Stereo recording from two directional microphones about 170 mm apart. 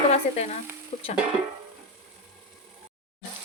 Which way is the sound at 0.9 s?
40° left (ahead or behind).